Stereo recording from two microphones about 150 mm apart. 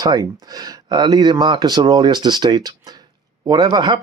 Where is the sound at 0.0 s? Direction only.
25° right (ahead or behind).